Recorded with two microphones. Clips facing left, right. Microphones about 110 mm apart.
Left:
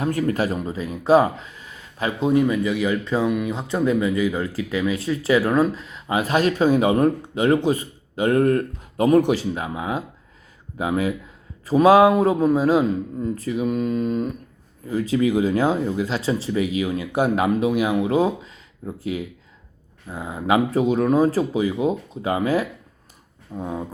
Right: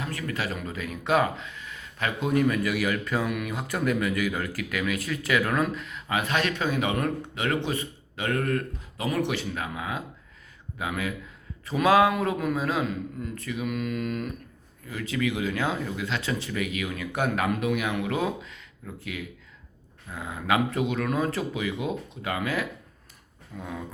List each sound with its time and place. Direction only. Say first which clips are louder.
0.0 s speech: left 10 dB; 40° left (ahead or behind)
9.5 s speech: left 6 dB; 25° left (ahead or behind)
20.1 s speech: left 5 dB; 30° left (ahead or behind)